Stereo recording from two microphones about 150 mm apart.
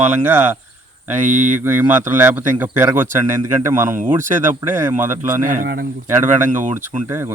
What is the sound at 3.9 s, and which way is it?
Speech, 60° right (ahead or behind).